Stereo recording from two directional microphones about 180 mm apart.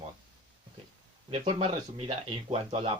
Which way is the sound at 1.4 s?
30° right (ahead or behind).